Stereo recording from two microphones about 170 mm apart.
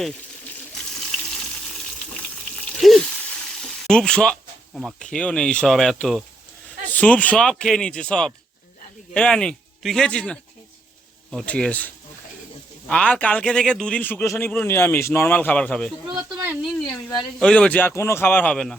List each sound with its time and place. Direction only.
0.9 s water: 5° left (ahead or behind)
2.7 s a sound: centre (ahead or behind)
3.8 s a man's voice: 5° left (ahead or behind)
12.9 s a man's voice: 5° left (ahead or behind)
16.0 s speech: 25° right (ahead or behind)
17.4 s a man's voice: 5° left (ahead or behind)